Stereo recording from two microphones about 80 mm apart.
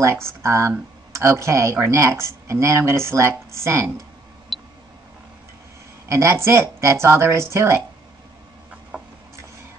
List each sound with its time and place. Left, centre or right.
0.0 s speech: right
4.5 s a sound: centre
6.0 s speech: right